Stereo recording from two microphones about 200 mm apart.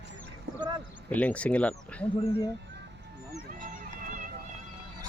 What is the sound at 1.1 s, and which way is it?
Speech, 5° left (ahead or behind).